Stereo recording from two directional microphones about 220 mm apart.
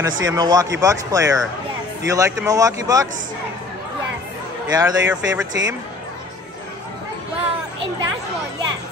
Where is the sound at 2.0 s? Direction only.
15° right (ahead or behind).